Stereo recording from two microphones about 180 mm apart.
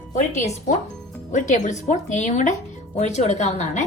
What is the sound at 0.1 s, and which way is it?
A woman's voice, 40° left (ahead or behind).